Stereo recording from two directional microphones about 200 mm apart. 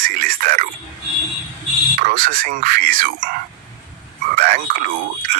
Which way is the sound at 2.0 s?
45° right (ahead or behind).